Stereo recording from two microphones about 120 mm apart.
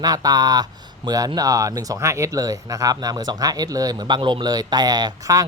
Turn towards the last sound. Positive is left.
turn(degrees=-30)  # may be behind; listen again after turning